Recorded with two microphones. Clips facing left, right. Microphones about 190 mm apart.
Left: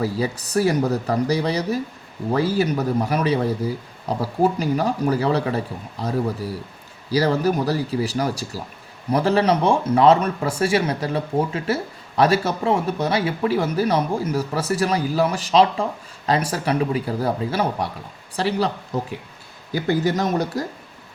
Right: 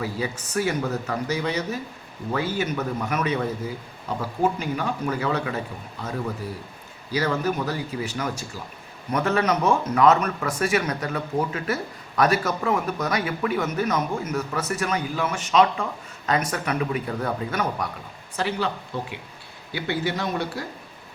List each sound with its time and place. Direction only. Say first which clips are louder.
0.0 s speech: left 5 dB; 35° left (ahead or behind)